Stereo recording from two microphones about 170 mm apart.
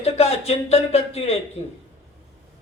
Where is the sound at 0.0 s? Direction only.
35° left (ahead or behind).